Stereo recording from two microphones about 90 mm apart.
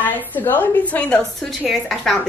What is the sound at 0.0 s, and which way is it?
A woman's voice, 20° left (ahead or behind).